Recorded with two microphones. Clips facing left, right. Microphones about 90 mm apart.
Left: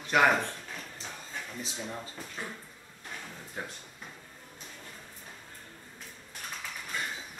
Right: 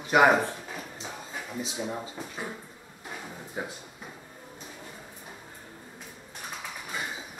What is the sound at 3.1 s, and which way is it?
Drawer open or close, 10° right (ahead or behind).